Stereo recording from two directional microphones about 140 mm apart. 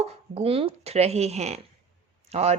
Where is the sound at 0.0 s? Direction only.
45° right (ahead or behind).